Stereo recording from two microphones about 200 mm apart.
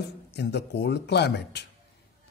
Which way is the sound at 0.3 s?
60° left (ahead or behind).